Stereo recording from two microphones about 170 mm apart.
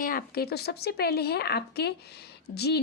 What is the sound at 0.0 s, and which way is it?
A woman's voice, 55° left (ahead or behind).